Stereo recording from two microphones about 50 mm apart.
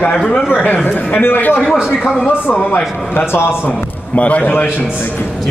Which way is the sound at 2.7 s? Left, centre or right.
Left.